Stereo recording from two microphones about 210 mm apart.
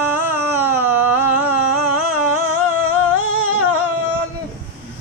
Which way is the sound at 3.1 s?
90° right.